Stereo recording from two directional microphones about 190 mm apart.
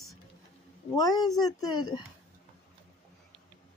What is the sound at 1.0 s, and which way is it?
Speech, 20° left (ahead or behind).